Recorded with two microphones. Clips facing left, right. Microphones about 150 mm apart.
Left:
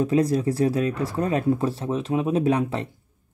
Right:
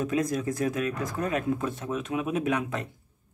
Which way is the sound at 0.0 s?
30° left (ahead or behind).